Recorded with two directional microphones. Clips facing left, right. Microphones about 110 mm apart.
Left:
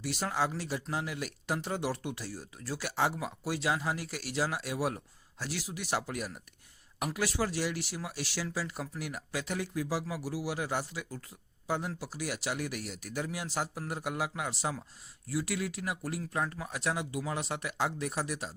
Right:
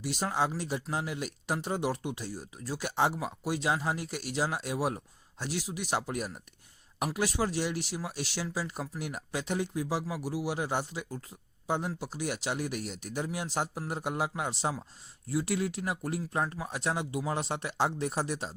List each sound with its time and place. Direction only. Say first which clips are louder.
0.0 s speech: right 2 dB; 15° right (ahead or behind)